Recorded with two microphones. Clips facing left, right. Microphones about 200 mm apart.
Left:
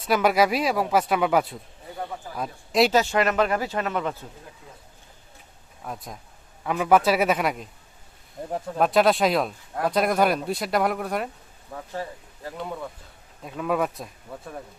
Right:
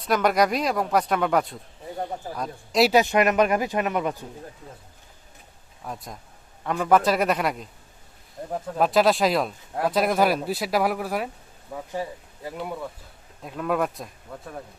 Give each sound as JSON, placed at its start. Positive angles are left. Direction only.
{"t": 0.0, "sound": "speech", "side_deg": 5}
{"t": 2.9, "sound": "speech", "side_deg": -15}
{"t": 5.8, "sound": "speech", "side_deg": 0}